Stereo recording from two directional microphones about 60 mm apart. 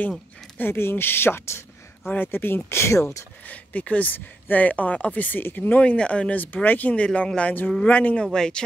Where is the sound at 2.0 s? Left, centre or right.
Left.